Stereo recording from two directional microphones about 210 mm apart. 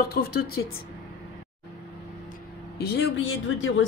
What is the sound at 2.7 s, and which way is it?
Speech, 50° left (ahead or behind).